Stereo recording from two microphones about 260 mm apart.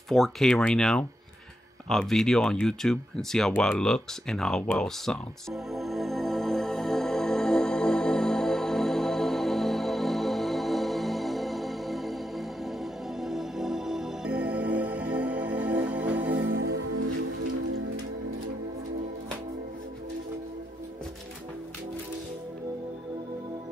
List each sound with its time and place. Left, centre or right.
0.1 s speech: centre
1.9 s a sound: centre
16.3 s music: right